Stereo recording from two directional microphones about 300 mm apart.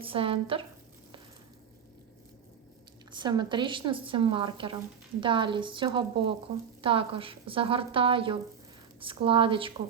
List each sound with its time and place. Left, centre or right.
0.0 s a woman's voice: centre
3.1 s a woman's voice: centre